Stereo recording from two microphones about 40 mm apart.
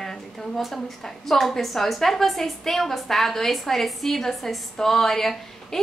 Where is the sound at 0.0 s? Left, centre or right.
Centre.